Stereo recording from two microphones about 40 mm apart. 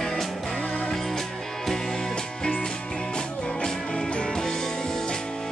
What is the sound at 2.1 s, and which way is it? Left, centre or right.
Music, left.